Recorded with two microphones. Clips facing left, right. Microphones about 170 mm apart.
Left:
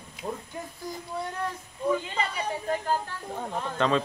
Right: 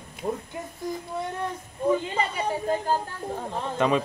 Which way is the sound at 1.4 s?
25° right (ahead or behind).